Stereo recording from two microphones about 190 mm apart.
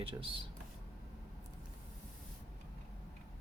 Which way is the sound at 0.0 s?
25° right (ahead or behind).